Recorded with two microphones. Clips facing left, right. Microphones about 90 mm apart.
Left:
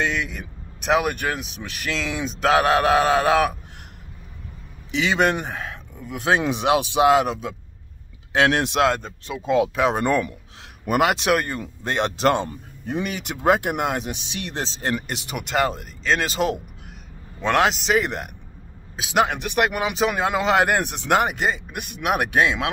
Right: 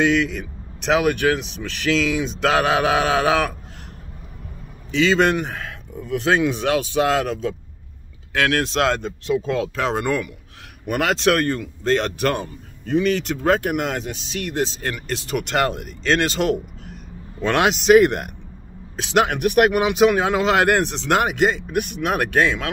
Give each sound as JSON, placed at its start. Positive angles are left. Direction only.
{"t": 0.0, "sound": "speech", "side_deg": 5}
{"t": 4.9, "sound": "speech", "side_deg": 15}
{"t": 6.5, "sound": "speech", "side_deg": 15}
{"t": 8.8, "sound": "speech", "side_deg": 5}
{"t": 9.4, "sound": "speech", "side_deg": 15}
{"t": 17.6, "sound": "speech", "side_deg": 0}